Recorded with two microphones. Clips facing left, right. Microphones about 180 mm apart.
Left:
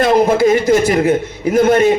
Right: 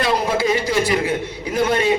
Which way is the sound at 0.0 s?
45° left (ahead or behind).